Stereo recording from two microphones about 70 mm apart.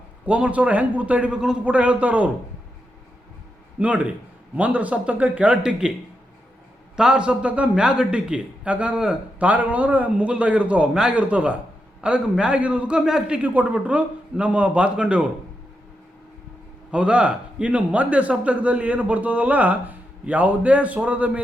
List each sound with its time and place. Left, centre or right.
0.3 s a man's voice: centre
3.8 s a man's voice: centre
6.9 s a man's voice: centre
16.9 s a man's voice: centre